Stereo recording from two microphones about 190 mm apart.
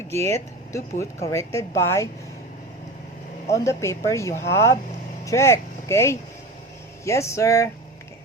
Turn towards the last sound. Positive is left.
turn(degrees=15)  # may be behind; listen again after turning